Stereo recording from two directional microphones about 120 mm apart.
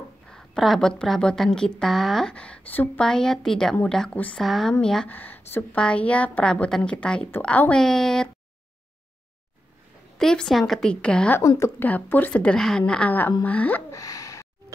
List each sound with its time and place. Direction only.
0.3 s a woman's voice: centre (ahead or behind)
10.1 s a woman's voice: 5° left (ahead or behind)
11.3 s a woman's voice: 25° left (ahead or behind)
11.8 s a woman's voice: 15° left (ahead or behind)
13.9 s gasp: 30° left (ahead or behind)